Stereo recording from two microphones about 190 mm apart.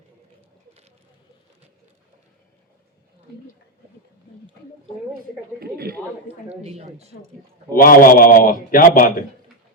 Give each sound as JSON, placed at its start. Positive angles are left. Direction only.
{"t": 5.5, "sound": "a woman's voice", "side_deg": -55}
{"t": 6.5, "sound": "speech", "side_deg": -35}
{"t": 7.8, "sound": "a man's voice", "side_deg": 50}